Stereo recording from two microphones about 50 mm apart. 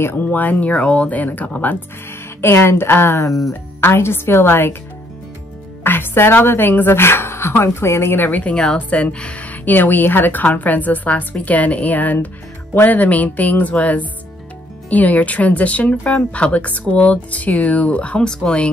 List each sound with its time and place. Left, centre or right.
0.2 s a woman's voice: left
2.4 s speech: left
5.9 s speech: left
8.2 s a woman's voice: left
18.2 s speech: centre